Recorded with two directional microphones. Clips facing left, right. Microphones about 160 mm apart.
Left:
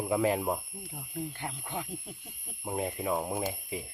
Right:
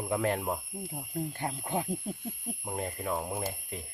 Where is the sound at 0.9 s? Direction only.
35° right (ahead or behind).